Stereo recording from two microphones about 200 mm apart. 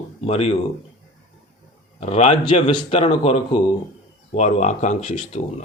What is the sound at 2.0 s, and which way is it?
Speech, 30° left (ahead or behind).